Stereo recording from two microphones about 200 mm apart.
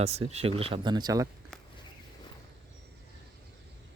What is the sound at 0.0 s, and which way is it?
Speech, 30° right (ahead or behind).